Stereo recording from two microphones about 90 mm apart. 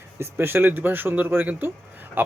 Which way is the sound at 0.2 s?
25° right (ahead or behind).